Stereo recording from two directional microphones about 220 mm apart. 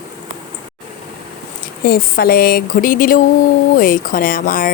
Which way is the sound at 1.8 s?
40° left (ahead or behind).